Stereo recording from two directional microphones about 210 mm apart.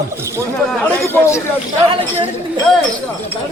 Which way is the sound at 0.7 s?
10° left (ahead or behind).